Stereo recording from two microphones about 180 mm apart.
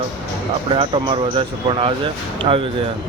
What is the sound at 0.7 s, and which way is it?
Speech, 25° right (ahead or behind).